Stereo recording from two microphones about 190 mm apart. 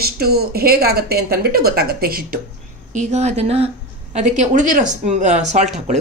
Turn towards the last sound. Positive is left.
turn(degrees=-35)  # may be behind; listen again after turning